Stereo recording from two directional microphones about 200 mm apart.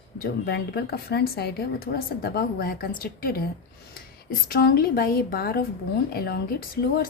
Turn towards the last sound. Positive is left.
turn(degrees=50)  # may be behind; listen again after turning